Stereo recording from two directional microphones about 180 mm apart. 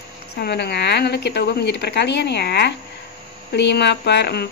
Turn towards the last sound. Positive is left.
turn(degrees=65)  # may be behind; listen again after turning